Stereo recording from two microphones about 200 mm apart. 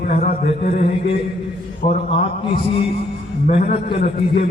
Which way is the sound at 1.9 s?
30° left (ahead or behind).